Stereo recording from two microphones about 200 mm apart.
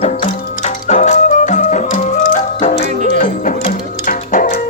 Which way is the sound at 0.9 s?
35° left (ahead or behind).